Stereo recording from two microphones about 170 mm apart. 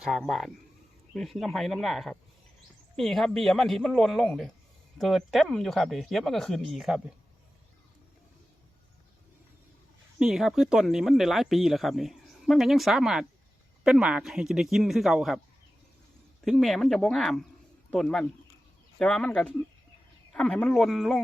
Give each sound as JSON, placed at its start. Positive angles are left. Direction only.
{"t": 0.0, "sound": "speech", "side_deg": 0}
{"t": 10.2, "sound": "speech", "side_deg": -5}
{"t": 16.4, "sound": "speech", "side_deg": 0}